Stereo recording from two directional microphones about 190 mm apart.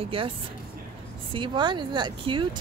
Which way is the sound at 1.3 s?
25° right (ahead or behind).